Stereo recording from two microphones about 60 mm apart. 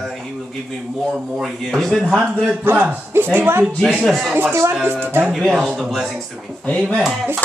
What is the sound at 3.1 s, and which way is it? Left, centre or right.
Speech, right.